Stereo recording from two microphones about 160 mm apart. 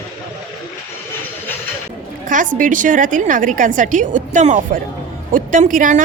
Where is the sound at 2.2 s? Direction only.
55° right (ahead or behind).